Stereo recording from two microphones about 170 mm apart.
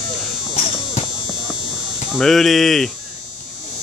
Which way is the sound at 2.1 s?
Centre (ahead or behind).